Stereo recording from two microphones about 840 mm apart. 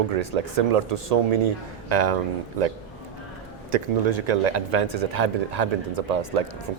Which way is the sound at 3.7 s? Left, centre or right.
Right.